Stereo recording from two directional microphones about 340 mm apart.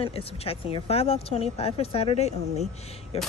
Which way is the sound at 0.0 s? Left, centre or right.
Centre.